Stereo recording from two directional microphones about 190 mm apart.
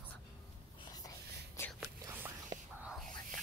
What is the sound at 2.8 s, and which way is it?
Whispering, centre (ahead or behind).